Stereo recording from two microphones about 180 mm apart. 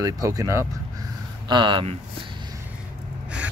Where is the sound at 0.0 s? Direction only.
20° right (ahead or behind).